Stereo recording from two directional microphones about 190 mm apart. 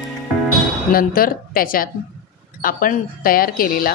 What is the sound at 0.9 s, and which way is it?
Speech, 50° left (ahead or behind).